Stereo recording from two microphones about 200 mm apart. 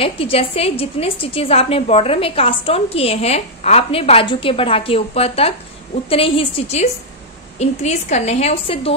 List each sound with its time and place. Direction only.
0.0 s a woman's voice: 30° left (ahead or behind)